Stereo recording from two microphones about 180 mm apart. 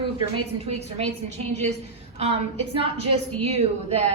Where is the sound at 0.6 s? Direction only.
35° right (ahead or behind).